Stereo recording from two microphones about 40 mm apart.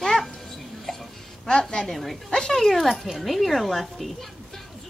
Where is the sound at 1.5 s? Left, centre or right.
Centre.